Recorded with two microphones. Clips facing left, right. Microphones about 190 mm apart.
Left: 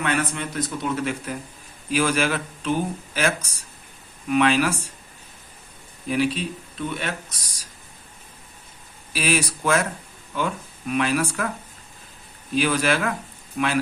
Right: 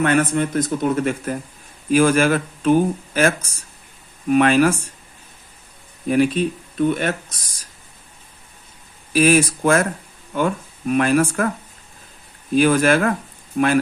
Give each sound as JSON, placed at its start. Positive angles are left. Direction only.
{"t": 0.0, "sound": "speech", "side_deg": -50}
{"t": 6.1, "sound": "speech", "side_deg": -50}
{"t": 9.1, "sound": "speech", "side_deg": -50}
{"t": 12.5, "sound": "speech", "side_deg": -50}